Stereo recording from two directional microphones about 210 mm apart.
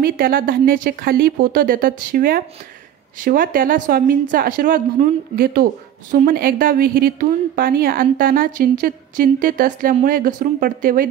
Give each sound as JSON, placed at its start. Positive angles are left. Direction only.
{"t": 0.0, "sound": "a woman's voice", "side_deg": -45}